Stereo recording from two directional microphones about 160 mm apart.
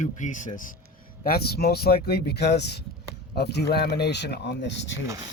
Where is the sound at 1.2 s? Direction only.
75° left (ahead or behind).